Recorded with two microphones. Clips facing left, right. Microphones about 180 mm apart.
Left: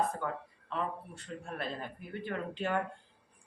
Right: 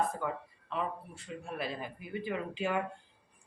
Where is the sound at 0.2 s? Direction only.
5° right (ahead or behind).